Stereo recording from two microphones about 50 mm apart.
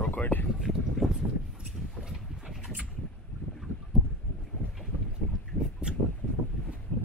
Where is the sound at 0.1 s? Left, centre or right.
Left.